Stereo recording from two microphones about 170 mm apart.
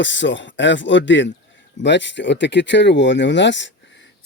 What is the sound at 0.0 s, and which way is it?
Speech, 90° left.